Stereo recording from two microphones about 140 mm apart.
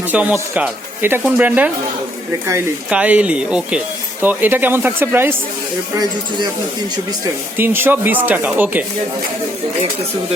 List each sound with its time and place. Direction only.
0.1 s speech: 10° right (ahead or behind)
2.9 s speech: 10° right (ahead or behind)
6.0 s speech: 35° right (ahead or behind)
7.5 s speech: 15° right (ahead or behind)